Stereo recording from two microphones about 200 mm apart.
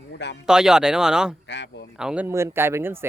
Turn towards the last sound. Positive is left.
turn(degrees=-10)  # may be behind; listen again after turning